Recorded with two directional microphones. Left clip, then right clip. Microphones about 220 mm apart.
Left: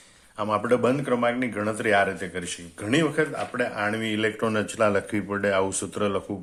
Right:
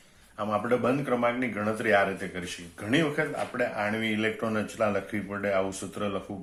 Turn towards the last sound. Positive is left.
turn(degrees=40)  # may be behind; listen again after turning